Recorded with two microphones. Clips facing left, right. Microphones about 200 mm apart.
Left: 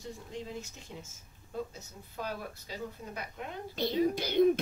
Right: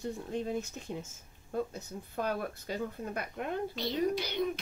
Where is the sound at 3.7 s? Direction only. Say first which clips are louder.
Left 4 dB; 50° left (ahead or behind).